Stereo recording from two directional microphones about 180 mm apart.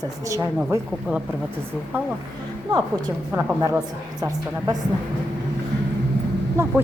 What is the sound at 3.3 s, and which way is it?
Speech, 5° right (ahead or behind).